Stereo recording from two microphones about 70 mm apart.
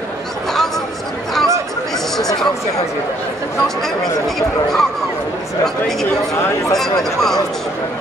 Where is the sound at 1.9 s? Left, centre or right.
Centre.